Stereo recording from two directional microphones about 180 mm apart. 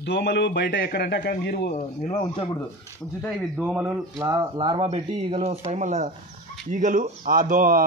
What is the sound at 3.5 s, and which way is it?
Speech, 5° right (ahead or behind).